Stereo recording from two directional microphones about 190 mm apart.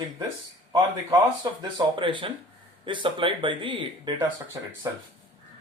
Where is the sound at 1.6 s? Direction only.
25° right (ahead or behind).